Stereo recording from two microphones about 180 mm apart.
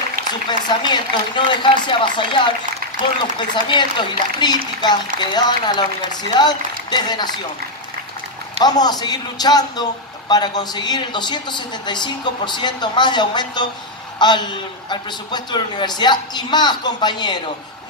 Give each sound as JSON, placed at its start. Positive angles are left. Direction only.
{"t": 0.5, "sound": "a man's voice", "side_deg": 25}
{"t": 8.5, "sound": "a man's voice", "side_deg": 20}